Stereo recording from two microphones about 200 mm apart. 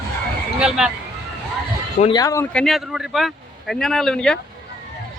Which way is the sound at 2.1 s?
15° left (ahead or behind).